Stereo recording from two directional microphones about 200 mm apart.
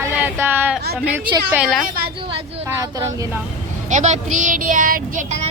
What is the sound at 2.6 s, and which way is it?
Speech, 15° right (ahead or behind).